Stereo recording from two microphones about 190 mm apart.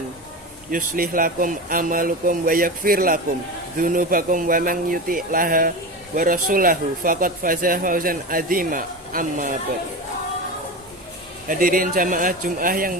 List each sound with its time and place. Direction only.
0.7 s speech: 50° right (ahead or behind)
11.4 s speech: 45° right (ahead or behind)